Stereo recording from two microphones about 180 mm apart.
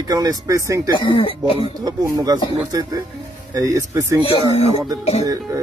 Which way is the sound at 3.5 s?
15° right (ahead or behind).